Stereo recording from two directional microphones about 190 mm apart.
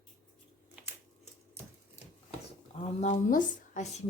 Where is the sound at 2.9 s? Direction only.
40° left (ahead or behind).